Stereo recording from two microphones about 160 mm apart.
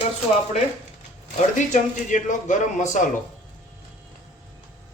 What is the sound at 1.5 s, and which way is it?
Speech, 50° left (ahead or behind).